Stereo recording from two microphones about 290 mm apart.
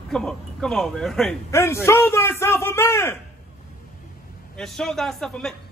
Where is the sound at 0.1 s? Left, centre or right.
Centre.